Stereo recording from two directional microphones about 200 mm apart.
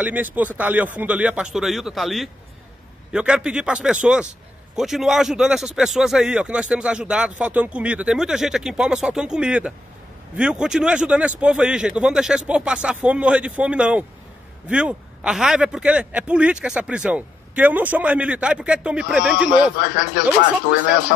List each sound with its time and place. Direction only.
0.0 s a man's voice: 10° right (ahead or behind)
19.8 s speech: 50° left (ahead or behind)